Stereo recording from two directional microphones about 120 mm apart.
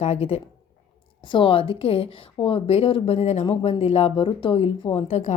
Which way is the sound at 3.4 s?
45° left (ahead or behind).